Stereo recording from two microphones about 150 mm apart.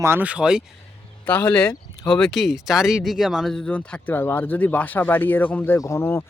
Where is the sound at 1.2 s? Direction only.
10° left (ahead or behind).